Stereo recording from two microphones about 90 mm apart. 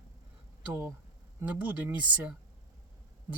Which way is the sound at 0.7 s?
30° right (ahead or behind).